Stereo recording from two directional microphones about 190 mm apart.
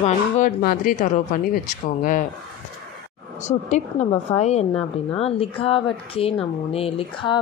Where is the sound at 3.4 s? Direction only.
40° left (ahead or behind).